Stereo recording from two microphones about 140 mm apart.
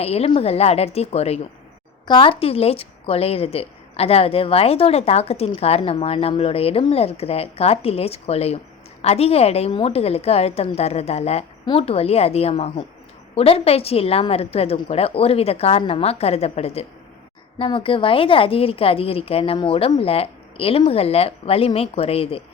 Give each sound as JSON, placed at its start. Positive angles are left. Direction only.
{"t": 0.0, "sound": "a woman's voice", "side_deg": 45}
{"t": 2.0, "sound": "a woman's voice", "side_deg": 35}